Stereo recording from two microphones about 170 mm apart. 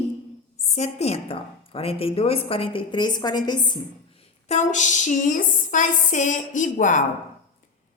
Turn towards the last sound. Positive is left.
turn(degrees=45)  # may be behind; listen again after turning